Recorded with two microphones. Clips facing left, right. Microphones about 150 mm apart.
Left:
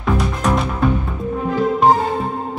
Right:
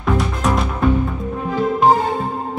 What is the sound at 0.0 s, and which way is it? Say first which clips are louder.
Music: even; centre (ahead or behind).